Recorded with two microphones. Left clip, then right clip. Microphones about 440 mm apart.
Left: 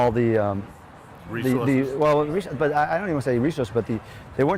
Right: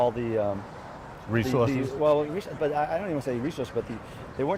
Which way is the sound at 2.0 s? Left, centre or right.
Left.